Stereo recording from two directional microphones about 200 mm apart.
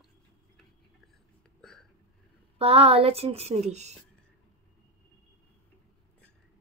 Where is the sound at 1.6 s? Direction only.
Centre (ahead or behind).